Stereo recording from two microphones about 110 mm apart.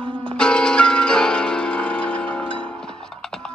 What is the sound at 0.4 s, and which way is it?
Music, 10° left (ahead or behind).